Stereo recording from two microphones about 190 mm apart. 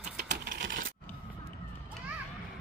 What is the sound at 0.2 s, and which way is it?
Computer keyboard, 60° right (ahead or behind).